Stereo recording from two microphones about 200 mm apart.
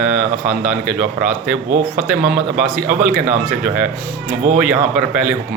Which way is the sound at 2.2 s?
45° right (ahead or behind).